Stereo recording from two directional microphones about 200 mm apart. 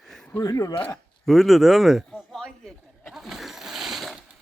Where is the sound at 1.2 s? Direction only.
Centre (ahead or behind).